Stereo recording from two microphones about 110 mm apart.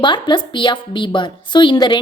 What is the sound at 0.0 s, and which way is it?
A woman's voice, 45° left (ahead or behind).